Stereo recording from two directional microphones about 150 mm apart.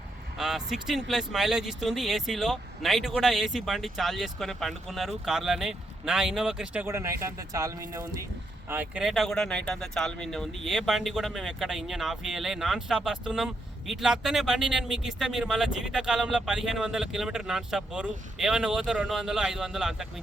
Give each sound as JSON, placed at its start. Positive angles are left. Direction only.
{"t": 0.3, "sound": "speech", "side_deg": 0}
{"t": 6.8, "sound": "speech", "side_deg": -20}
{"t": 8.7, "sound": "speech", "side_deg": -10}